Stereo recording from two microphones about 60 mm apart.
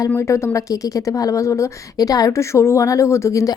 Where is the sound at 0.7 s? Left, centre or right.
Left.